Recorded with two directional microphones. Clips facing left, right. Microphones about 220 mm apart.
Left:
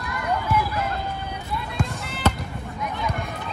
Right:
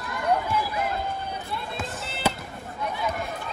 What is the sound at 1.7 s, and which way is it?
Basketball bounce, centre (ahead or behind).